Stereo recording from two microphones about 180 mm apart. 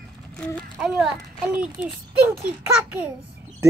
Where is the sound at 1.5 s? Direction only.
5° right (ahead or behind).